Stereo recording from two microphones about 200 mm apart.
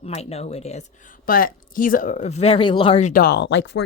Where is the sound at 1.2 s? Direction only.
45° left (ahead or behind).